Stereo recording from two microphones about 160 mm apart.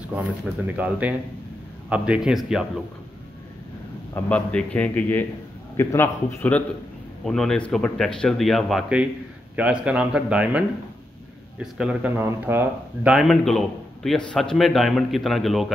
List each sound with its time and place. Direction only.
0.7 s speech: 10° right (ahead or behind)
4.1 s a man's voice: 10° left (ahead or behind)